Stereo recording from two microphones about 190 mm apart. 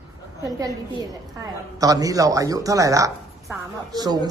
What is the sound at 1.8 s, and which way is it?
A woman's voice, 20° right (ahead or behind).